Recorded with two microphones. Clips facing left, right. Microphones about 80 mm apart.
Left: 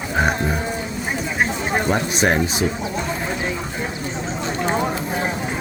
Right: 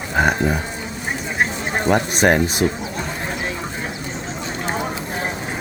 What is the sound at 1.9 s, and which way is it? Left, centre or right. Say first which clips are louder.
Speech: right 5 dB; right.